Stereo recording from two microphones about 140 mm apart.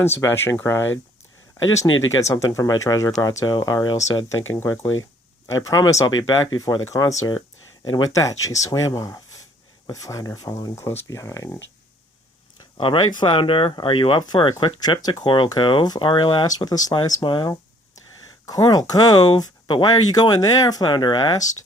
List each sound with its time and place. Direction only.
0.2 s speech: 15° left (ahead or behind)
12.7 s speech: 35° left (ahead or behind)